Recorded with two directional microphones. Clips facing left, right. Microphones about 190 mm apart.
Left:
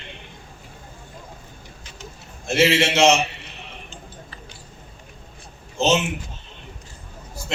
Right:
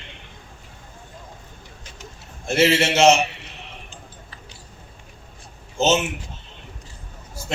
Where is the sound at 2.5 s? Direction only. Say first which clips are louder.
Even; 45° right (ahead or behind).